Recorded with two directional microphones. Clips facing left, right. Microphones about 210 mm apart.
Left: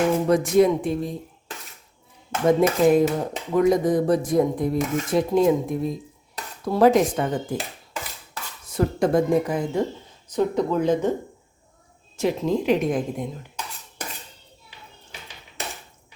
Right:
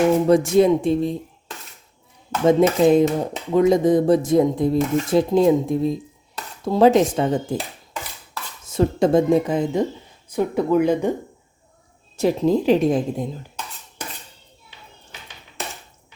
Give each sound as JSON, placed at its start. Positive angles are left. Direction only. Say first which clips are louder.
{"t": 0.3, "sound": "speech", "louder": "even", "side_deg": -30}
{"t": 2.5, "sound": "speech", "louder": "right 3 dB", "side_deg": -25}
{"t": 8.7, "sound": "speech", "louder": "right 3 dB", "side_deg": -25}
{"t": 10.3, "sound": "speech", "louder": "right 3 dB", "side_deg": -10}
{"t": 12.1, "sound": "a woman's voice", "louder": "right 4 dB", "side_deg": -35}